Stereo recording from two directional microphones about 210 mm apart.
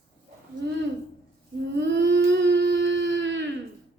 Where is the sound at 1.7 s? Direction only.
55° right (ahead or behind).